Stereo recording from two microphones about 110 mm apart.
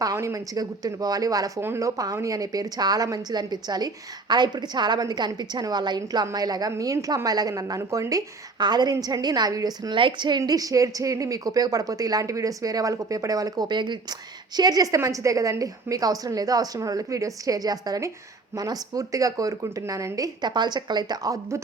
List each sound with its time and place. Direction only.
0.0 s a woman's voice: 30° right (ahead or behind)
1.6 s a woman's voice: 25° right (ahead or behind)